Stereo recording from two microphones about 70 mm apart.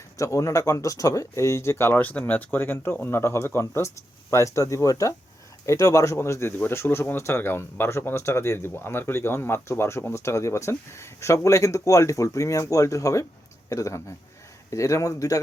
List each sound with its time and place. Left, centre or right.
0.2 s speech: left